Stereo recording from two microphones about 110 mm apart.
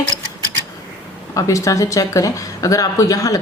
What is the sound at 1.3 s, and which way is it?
Speech, 30° left (ahead or behind).